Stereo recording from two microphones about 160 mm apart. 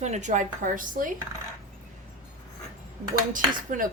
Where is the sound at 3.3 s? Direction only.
55° right (ahead or behind).